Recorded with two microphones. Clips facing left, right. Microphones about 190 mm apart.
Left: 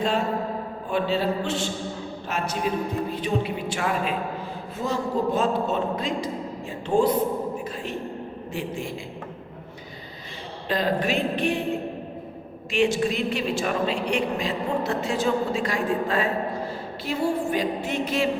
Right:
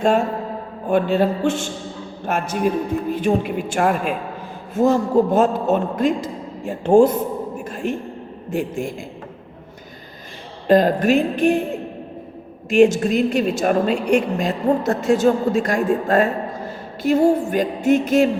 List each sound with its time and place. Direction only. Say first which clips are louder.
0.9 s a woman's voice: right 7 dB; 50° right (ahead or behind)
7.6 s a sound: right 7 dB; 50° right (ahead or behind)
8.4 s a woman's voice: right 8 dB; 45° right (ahead or behind)
10.7 s a woman's voice: right 10 dB; 45° right (ahead or behind)
12.7 s a woman's voice: right 8 dB; 45° right (ahead or behind)